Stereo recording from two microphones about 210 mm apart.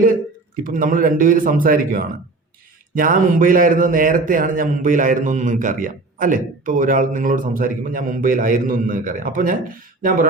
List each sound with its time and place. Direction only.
0.6 s a man's voice: 40° right (ahead or behind)